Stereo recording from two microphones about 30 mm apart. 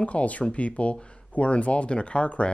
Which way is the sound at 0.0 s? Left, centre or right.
Left.